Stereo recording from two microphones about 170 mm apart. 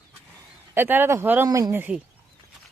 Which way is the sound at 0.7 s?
10° right (ahead or behind).